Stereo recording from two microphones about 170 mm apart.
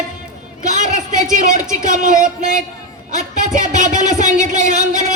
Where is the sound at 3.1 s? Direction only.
50° right (ahead or behind).